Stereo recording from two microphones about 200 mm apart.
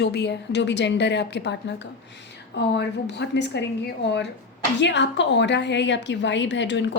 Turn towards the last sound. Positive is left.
turn(degrees=65)  # may be behind; listen again after turning